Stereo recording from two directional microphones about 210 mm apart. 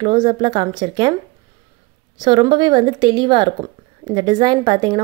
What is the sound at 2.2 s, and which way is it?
A woman's voice, 20° right (ahead or behind).